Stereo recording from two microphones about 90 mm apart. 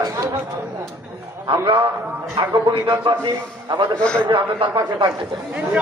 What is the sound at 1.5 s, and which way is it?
Speech, 65° right (ahead or behind).